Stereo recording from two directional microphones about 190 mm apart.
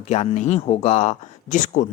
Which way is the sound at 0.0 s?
35° left (ahead or behind).